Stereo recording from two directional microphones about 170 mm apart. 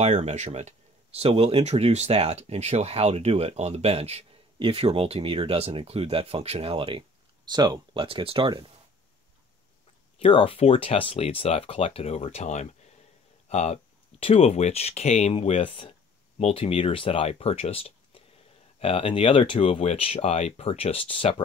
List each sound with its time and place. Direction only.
0.0 s speech: 40° right (ahead or behind)
10.2 s speech: 30° left (ahead or behind)